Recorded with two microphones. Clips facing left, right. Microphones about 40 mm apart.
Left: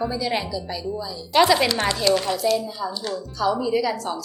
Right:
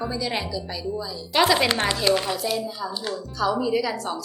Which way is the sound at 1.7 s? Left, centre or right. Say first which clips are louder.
Even; right.